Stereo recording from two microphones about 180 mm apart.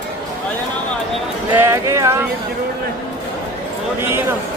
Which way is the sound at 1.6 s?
15° right (ahead or behind).